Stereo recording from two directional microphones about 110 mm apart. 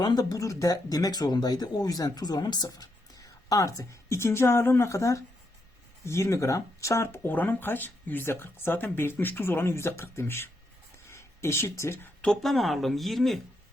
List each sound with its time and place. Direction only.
0.0 s speech: 40° left (ahead or behind)
12.2 s speech: 5° left (ahead or behind)